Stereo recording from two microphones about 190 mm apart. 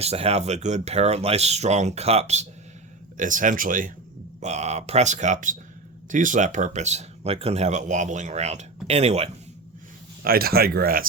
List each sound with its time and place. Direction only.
0.0 s speech: 35° right (ahead or behind)
10.2 s speech: 50° right (ahead or behind)